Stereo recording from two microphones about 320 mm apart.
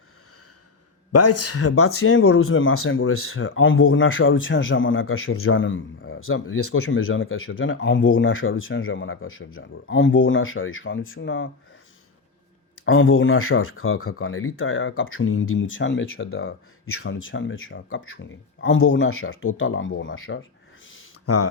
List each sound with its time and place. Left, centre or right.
1.1 s speech: left
12.8 s speech: left
20.8 s a sound: left